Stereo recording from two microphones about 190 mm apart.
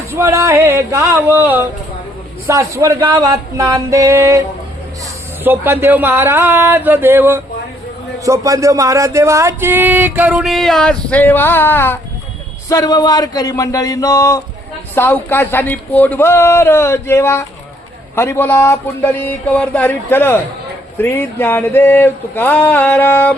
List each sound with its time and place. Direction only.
0.1 s speech: 15° right (ahead or behind); by 11.9 s 10° left (ahead or behind)
12.6 s a sound: 20° left (ahead or behind)
14.9 s speech: 10° left (ahead or behind)